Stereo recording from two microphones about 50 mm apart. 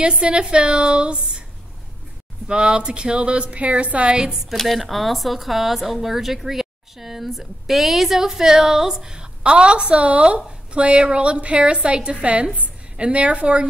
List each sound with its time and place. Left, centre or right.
0.0 s a woman's voice: right
2.4 s a woman's voice: centre
4.5 s a woman's voice: centre; by 13.7 s right